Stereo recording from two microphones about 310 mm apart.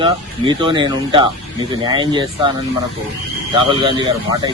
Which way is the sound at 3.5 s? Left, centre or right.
Centre.